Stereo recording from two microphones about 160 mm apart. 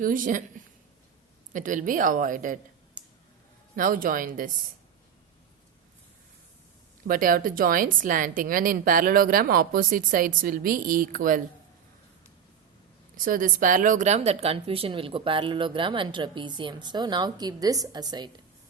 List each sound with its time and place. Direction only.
0.0 s a woman's voice: 60° right (ahead or behind)
1.5 s a woman's voice: 55° right (ahead or behind)
3.0 s a sound: 10° right (ahead or behind)
3.8 s a woman's voice: 60° right (ahead or behind)
7.1 s a woman's voice: 60° right (ahead or behind)
13.1 s speech: 60° right (ahead or behind); by 18.3 s 25° right (ahead or behind)